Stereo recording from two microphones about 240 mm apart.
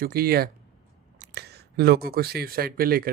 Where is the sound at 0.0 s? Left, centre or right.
Right.